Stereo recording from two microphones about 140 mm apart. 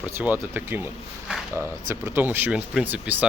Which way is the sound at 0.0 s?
15° right (ahead or behind).